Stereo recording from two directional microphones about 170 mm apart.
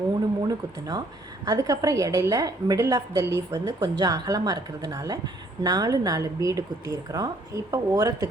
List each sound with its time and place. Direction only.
0.4 s speech: 25° right (ahead or behind)